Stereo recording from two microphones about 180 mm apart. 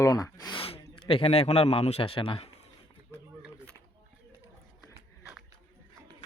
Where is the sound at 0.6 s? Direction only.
30° left (ahead or behind).